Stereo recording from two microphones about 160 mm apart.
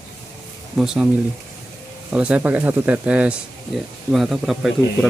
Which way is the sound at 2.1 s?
10° right (ahead or behind).